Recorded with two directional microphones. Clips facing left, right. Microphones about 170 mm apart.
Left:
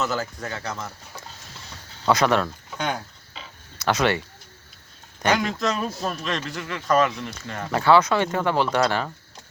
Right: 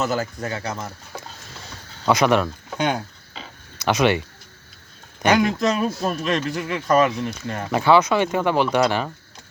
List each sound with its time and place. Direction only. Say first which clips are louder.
0.0 s speech: right 3 dB; 15° right (ahead or behind)
2.0 s speech: right 2 dB; 15° right (ahead or behind)
5.2 s speech: right 4 dB; 15° right (ahead or behind)